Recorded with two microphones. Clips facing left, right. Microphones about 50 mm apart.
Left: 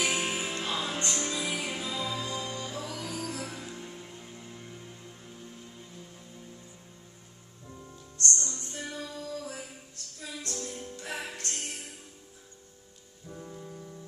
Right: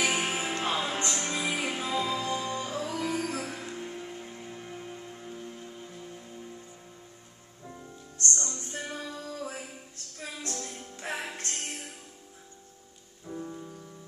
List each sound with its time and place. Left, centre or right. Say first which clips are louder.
0.0 s music: right 2 dB; right
8.2 s music: even; right
11.0 s music: right 5 dB; right
13.3 s music: right 4 dB; centre